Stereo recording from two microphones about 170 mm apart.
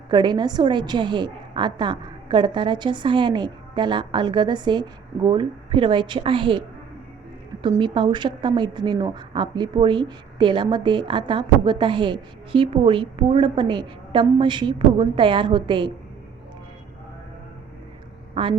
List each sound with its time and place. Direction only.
0.1 s speech: 25° right (ahead or behind)
7.6 s speech: 30° right (ahead or behind)
18.4 s a woman's voice: 35° right (ahead or behind)